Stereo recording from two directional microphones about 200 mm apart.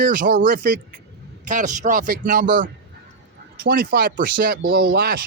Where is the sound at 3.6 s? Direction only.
45° right (ahead or behind).